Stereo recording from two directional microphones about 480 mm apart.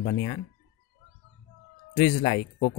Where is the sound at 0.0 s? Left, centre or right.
Centre.